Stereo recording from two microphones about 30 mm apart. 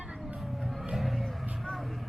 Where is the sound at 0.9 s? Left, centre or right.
Centre.